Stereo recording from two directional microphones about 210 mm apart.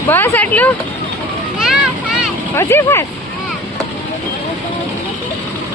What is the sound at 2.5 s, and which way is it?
Speech, 10° left (ahead or behind).